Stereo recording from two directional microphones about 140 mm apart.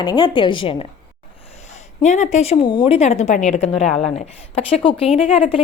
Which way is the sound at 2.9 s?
55° left (ahead or behind).